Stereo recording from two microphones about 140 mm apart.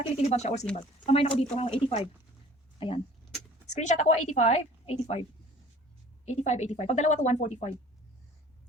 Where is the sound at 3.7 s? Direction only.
55° left (ahead or behind).